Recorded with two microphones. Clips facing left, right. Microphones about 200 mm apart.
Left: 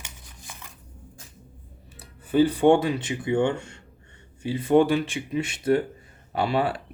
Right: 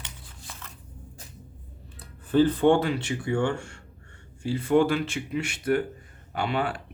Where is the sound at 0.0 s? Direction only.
15° left (ahead or behind).